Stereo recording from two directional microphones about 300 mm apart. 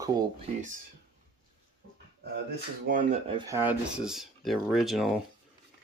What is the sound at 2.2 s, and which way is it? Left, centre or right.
Speech, right.